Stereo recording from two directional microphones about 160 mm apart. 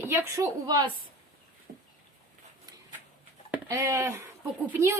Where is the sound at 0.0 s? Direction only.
15° right (ahead or behind).